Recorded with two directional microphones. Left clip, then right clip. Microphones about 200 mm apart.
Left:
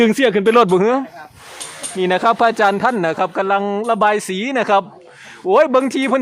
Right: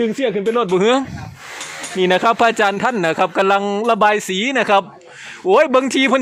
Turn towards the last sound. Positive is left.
turn(degrees=0)  # may be behind; listen again after turning